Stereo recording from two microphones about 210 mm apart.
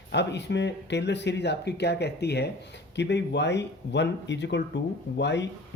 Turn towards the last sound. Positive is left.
turn(degrees=55)  # may be behind; listen again after turning